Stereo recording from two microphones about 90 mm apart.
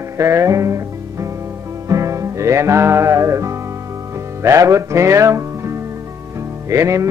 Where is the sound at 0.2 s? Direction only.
30° right (ahead or behind).